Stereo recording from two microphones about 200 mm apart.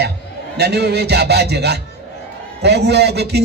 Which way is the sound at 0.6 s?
55° right (ahead or behind).